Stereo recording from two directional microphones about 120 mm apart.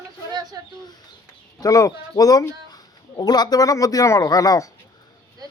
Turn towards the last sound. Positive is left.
turn(degrees=30)  # may be behind; listen again after turning